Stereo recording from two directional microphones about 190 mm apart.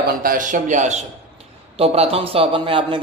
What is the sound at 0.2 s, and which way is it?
A man's voice, 45° right (ahead or behind).